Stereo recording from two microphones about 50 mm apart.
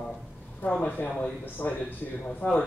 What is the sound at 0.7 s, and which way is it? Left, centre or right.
Speech, left.